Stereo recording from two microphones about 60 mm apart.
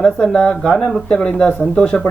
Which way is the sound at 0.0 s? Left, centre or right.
Centre.